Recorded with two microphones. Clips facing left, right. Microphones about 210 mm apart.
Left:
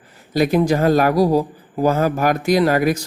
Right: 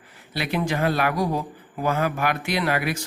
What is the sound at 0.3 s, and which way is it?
Speech, 45° left (ahead or behind).